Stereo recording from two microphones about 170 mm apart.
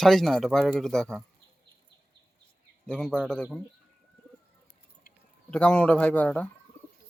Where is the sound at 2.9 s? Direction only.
5° left (ahead or behind).